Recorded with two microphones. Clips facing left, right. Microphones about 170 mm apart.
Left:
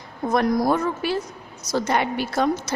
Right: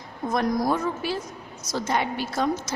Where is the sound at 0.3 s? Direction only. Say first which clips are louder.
Left 4 dB; 65° left (ahead or behind).